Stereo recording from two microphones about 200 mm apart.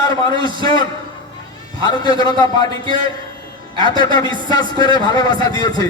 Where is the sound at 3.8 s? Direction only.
20° left (ahead or behind).